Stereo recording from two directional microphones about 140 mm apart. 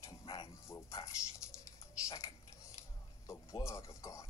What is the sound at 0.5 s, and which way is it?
Dog, 20° left (ahead or behind).